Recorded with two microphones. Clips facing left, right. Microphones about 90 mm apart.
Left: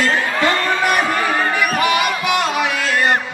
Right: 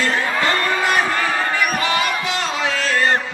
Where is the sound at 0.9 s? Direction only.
20° left (ahead or behind).